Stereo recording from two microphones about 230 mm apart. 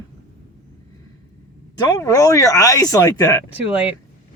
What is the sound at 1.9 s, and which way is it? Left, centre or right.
Speech, centre.